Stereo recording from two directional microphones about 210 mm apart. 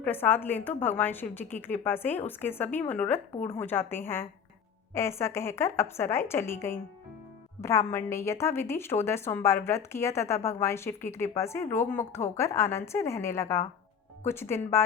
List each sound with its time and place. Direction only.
0.0 s a woman's voice: 10° left (ahead or behind)